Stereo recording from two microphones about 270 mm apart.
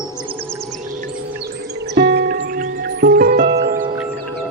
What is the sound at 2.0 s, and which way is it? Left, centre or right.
Music, right.